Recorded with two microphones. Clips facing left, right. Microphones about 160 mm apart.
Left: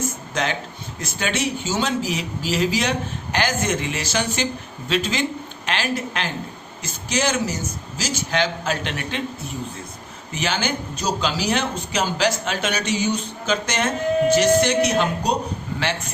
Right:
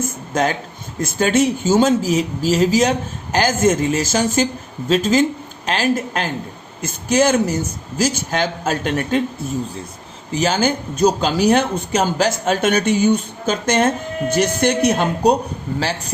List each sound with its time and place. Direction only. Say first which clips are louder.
0.3 s a woman's voice: right 7 dB; 50° right (ahead or behind)
10.3 s speech: right 7 dB; 40° right (ahead or behind)
15.8 s a woman's voice: right 2 dB; 35° right (ahead or behind)